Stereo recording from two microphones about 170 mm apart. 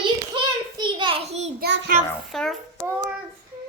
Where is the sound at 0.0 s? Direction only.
30° right (ahead or behind).